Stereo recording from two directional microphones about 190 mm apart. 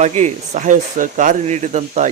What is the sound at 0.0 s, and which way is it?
A man's voice, 40° right (ahead or behind).